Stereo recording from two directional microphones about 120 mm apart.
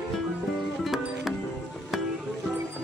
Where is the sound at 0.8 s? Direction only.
Centre (ahead or behind).